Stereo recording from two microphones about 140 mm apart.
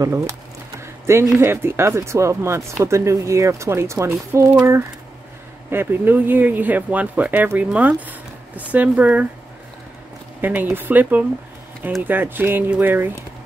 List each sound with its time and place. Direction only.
0.0 s a sound: 20° right (ahead or behind)
1.3 s speech: 15° right (ahead or behind)
10.4 s speech: 10° right (ahead or behind)